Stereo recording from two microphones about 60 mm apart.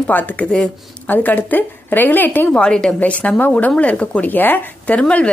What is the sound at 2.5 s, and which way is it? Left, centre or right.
A woman's voice, centre.